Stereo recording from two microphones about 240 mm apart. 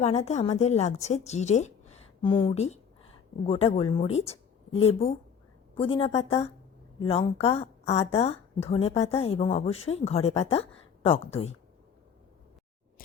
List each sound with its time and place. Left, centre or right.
0.0 s a woman's voice: left